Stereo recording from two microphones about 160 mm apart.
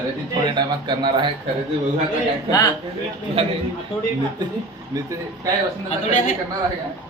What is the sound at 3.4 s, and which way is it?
Speech, 40° right (ahead or behind).